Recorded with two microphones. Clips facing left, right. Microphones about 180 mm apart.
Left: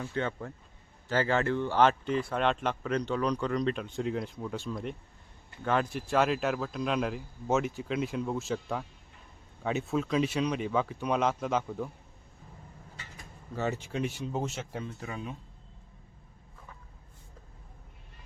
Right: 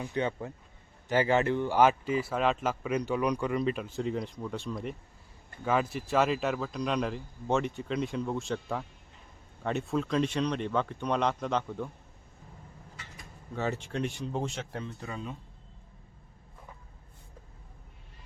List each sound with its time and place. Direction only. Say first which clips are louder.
0.0 s speech: right 2 dB; 15° right (ahead or behind); by 11.9 s 5° left (ahead or behind)
13.1 s speech: even; centre (ahead or behind)